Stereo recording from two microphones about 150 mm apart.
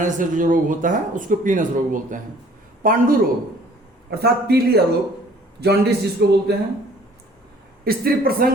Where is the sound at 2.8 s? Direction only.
70° right (ahead or behind).